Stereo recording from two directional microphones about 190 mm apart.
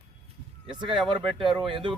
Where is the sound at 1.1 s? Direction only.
25° right (ahead or behind).